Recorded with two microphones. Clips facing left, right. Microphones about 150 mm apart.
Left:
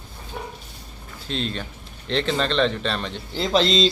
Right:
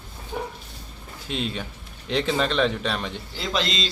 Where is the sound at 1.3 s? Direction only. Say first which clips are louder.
Left 1 dB; 10° right (ahead or behind).